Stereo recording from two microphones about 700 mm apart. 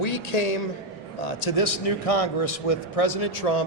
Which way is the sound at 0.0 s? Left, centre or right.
Left.